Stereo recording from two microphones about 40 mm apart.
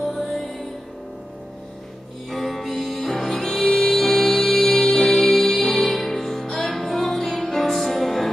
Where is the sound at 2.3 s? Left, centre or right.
Centre.